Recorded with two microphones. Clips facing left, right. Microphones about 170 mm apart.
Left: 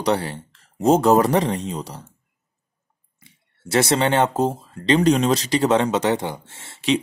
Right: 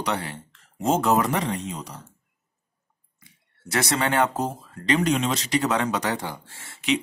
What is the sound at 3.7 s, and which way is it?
Speech, 30° left (ahead or behind).